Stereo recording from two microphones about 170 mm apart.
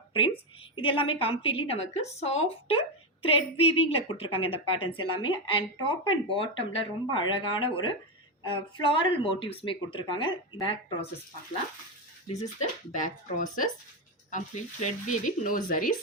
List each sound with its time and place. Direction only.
0.8 s a woman's voice: 30° left (ahead or behind)
12.4 s speech: 45° left (ahead or behind)